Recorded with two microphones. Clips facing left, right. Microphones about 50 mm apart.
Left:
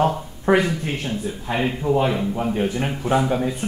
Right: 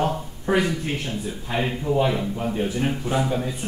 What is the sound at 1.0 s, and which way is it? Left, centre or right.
Speech, centre.